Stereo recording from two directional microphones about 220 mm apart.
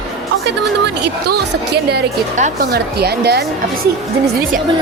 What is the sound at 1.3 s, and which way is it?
Speech, 50° right (ahead or behind).